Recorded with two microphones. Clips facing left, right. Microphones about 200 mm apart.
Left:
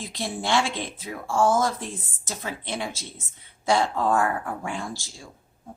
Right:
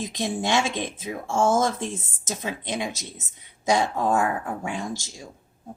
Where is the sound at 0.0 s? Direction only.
20° right (ahead or behind).